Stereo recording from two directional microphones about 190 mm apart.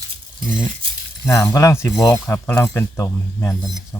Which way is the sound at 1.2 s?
15° left (ahead or behind).